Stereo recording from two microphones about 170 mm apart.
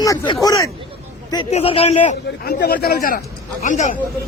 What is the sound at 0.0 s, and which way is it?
Speech, 20° left (ahead or behind).